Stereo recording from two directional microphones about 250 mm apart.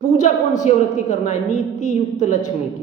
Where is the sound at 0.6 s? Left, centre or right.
Left.